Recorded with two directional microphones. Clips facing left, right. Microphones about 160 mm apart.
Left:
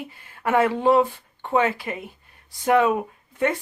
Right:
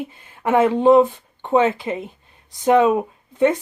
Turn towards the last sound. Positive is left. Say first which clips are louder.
# right 6 dB
turn(degrees=-20)  # may be behind; listen again after turning